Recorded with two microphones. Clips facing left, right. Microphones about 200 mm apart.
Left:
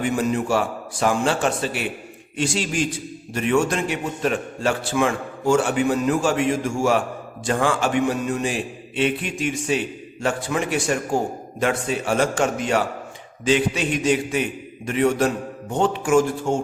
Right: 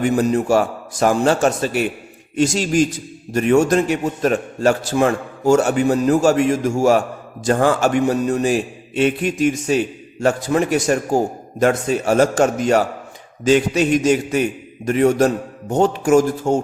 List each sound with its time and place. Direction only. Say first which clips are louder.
0.0 s a man's voice: right 5 dB; 40° right (ahead or behind)